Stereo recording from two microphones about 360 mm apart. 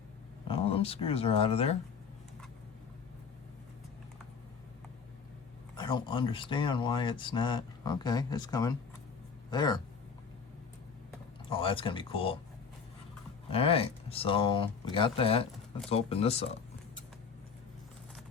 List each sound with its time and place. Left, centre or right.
0.4 s speech: centre
5.7 s speech: centre
11.4 s speech: centre
13.5 s speech: centre